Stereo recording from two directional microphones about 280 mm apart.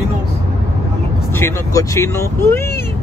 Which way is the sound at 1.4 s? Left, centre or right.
Centre.